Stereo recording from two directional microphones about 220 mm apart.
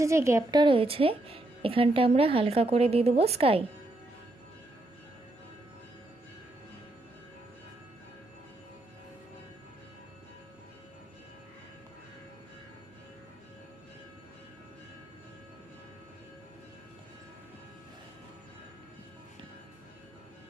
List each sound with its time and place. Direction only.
0.0 s speech: 15° right (ahead or behind)